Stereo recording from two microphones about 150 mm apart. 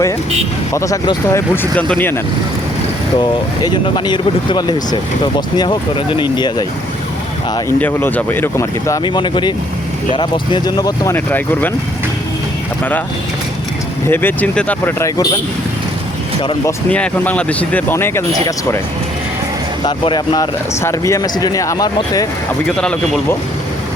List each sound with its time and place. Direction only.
0.7 s speech: 20° left (ahead or behind)
3.2 s speech: 30° left (ahead or behind)
7.8 s speech: 15° left (ahead or behind)
9.0 s speech: 30° left (ahead or behind)
11.1 s speech: 10° left (ahead or behind)
14.1 s speech: 15° left (ahead or behind)
16.9 s speech: 10° left (ahead or behind)
19.8 s speech: 30° left (ahead or behind)
22.6 s speech: 5° left (ahead or behind)